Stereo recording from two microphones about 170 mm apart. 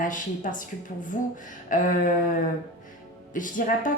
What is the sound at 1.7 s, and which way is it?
Speech, 50° left (ahead or behind).